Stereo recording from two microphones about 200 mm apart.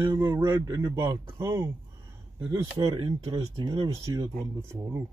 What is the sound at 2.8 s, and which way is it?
Speech, 20° right (ahead or behind).